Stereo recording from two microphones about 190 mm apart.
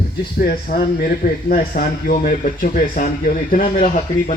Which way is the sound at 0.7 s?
55° left (ahead or behind).